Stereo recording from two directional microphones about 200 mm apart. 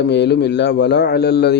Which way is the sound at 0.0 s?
55° left (ahead or behind).